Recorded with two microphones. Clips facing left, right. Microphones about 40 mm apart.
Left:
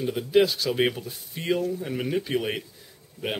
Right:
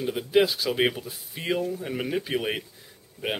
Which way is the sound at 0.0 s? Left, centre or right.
Centre.